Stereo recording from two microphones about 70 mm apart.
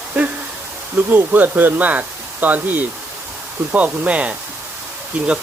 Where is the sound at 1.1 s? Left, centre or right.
Right.